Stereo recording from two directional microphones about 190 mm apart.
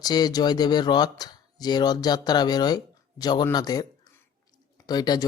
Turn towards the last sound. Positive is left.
turn(degrees=20)  # may be behind; listen again after turning